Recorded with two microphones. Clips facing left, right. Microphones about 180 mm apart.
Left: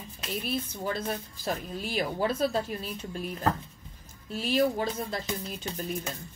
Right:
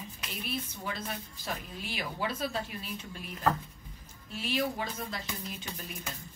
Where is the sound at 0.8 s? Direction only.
35° left (ahead or behind).